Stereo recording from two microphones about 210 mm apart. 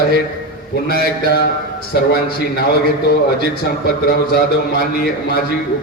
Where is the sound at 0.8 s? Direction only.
45° left (ahead or behind).